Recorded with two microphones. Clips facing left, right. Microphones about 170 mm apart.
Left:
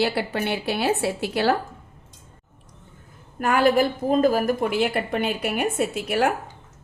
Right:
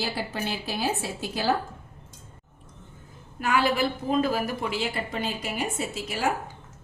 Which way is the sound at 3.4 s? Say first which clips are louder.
Left 5 dB; 50° left (ahead or behind).